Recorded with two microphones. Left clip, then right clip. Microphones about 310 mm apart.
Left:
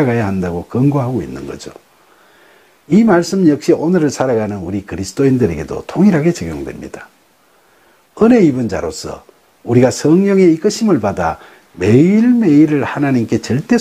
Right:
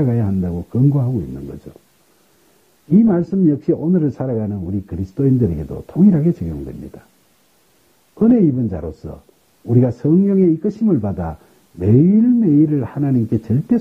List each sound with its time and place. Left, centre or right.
0.0 s speech: centre
3.1 s speech: centre
8.1 s speech: centre